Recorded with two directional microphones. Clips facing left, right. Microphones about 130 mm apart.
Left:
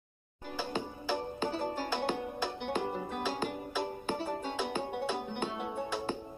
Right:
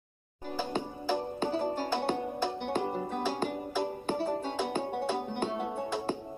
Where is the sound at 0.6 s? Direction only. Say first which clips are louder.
Right 3 dB; 45° right (ahead or behind).